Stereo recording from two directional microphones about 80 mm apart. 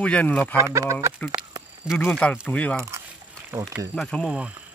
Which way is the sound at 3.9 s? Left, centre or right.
Left.